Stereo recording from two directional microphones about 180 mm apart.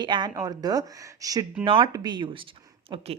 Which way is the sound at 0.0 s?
25° right (ahead or behind).